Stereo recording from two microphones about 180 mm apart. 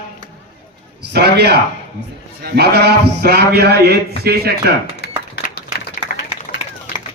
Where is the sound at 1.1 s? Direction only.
65° right (ahead or behind).